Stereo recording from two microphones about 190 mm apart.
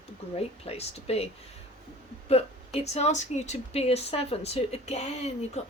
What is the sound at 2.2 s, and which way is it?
Speech, 30° left (ahead or behind).